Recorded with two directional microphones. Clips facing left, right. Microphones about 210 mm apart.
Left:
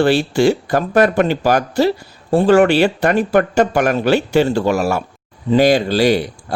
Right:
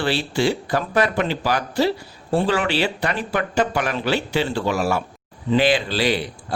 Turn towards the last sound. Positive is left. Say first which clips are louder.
# left 6 dB
turn(degrees=45)  # may be behind; listen again after turning